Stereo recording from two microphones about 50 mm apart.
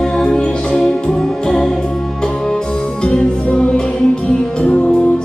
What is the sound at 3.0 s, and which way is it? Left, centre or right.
Music, centre.